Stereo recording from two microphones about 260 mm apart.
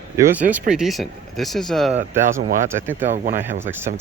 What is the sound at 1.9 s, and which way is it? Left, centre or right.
Speech, right.